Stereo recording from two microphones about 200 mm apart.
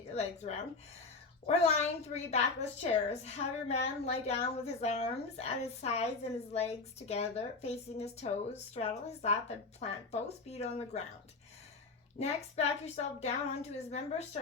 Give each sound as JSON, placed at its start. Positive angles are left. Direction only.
{"t": 0.1, "sound": "a woman's voice", "side_deg": 35}
{"t": 12.2, "sound": "a woman's voice", "side_deg": 35}